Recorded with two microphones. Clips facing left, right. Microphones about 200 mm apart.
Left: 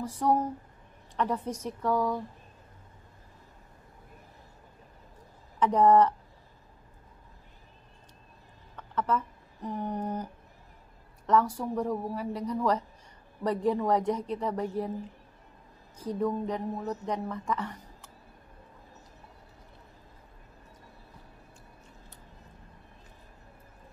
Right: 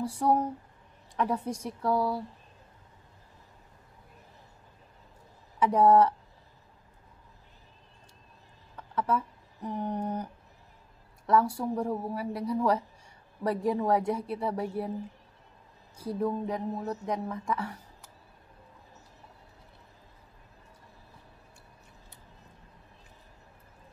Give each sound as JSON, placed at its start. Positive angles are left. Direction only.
{"t": 0.0, "sound": "speech", "side_deg": -10}
{"t": 5.6, "sound": "speech", "side_deg": -10}
{"t": 8.7, "sound": "speech", "side_deg": -10}
{"t": 11.2, "sound": "speech", "side_deg": -10}
{"t": 16.0, "sound": "speech", "side_deg": -10}